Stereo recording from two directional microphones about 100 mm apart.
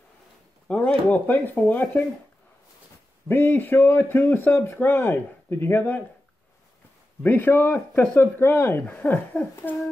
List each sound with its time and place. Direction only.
0.7 s chop: 10° left (ahead or behind)
1.0 s speech: 15° left (ahead or behind)
3.3 s a man's voice: 20° left (ahead or behind)
7.2 s a man's voice: 20° left (ahead or behind)